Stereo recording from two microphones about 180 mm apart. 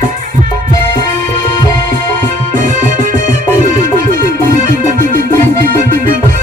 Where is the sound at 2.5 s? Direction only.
45° right (ahead or behind).